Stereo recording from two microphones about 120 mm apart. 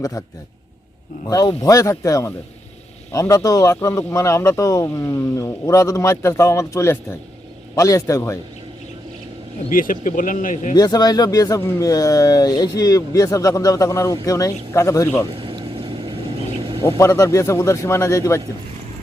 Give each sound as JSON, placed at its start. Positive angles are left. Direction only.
{"t": 0.0, "sound": "speech", "side_deg": 25}
{"t": 1.3, "sound": "speech", "side_deg": 30}
{"t": 10.0, "sound": "speech", "side_deg": 90}
{"t": 10.8, "sound": "speech", "side_deg": 35}
{"t": 15.4, "sound": "a sound", "side_deg": -45}
{"t": 17.0, "sound": "speech", "side_deg": 25}